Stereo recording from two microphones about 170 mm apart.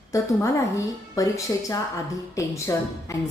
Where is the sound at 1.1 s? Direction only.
20° left (ahead or behind).